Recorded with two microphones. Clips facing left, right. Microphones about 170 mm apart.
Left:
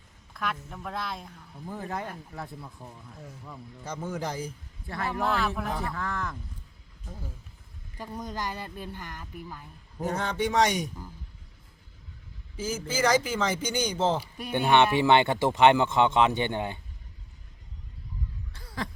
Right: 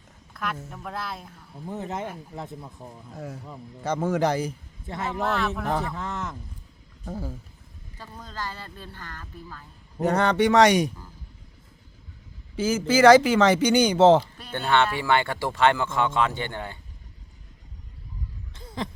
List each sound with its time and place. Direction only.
0.3 s speech: centre (ahead or behind)
1.6 s speech: 20° right (ahead or behind)
3.2 s speech: 85° right
4.9 s speech: 20° right (ahead or behind)
5.2 s speech: centre (ahead or behind)
5.8 s speech: 20° right (ahead or behind)
7.0 s speech: 90° right
7.9 s speech: 15° left (ahead or behind)
10.0 s a man's voice: 70° right (ahead or behind)
12.5 s speech: 85° right
14.3 s speech: 15° left (ahead or behind)
18.5 s a sound: 20° right (ahead or behind)